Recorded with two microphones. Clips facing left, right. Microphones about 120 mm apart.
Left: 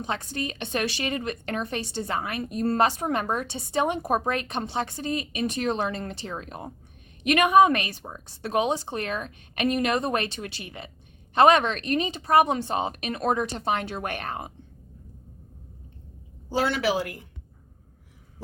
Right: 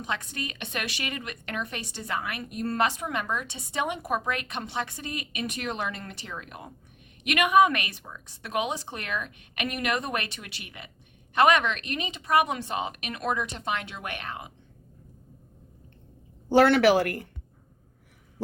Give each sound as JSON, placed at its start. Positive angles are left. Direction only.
{"t": 0.0, "sound": "a woman's voice", "side_deg": 30}
{"t": 16.5, "sound": "speech", "side_deg": -65}